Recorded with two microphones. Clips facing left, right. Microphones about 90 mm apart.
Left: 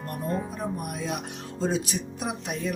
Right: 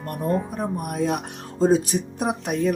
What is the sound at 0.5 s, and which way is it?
Speech, 50° right (ahead or behind).